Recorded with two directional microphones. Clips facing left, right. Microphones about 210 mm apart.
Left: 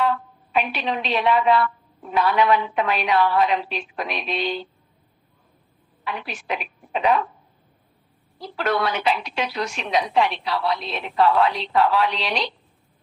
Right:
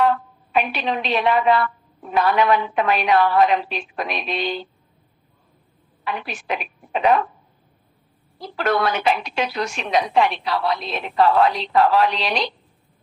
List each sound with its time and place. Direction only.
0.0 s a woman's voice: 50° right (ahead or behind)
6.1 s a woman's voice: 50° right (ahead or behind)
8.4 s a woman's voice: 50° right (ahead or behind)